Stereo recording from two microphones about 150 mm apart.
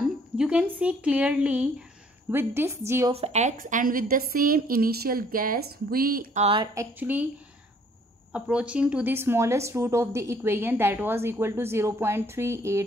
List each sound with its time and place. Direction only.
0.4 s speech: 10° right (ahead or behind)
3.1 s a woman's voice: 45° right (ahead or behind)
3.5 s a woman's voice: 70° right (ahead or behind)
6.3 s a woman's voice: 45° right (ahead or behind)
6.6 s speech: 20° right (ahead or behind)
8.3 s speech: 5° right (ahead or behind)